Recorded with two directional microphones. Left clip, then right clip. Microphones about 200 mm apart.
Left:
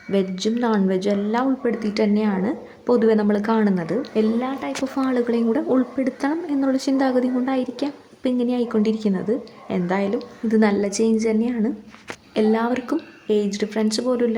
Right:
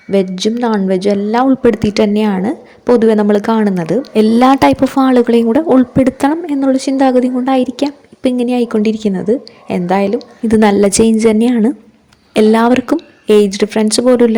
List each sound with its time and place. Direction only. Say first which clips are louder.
0.1 s a woman's voice: right 8 dB; 30° right (ahead or behind)
4.4 s speech: right 18 dB; 55° right (ahead or behind)
4.9 s speech: right 11 dB; 35° right (ahead or behind)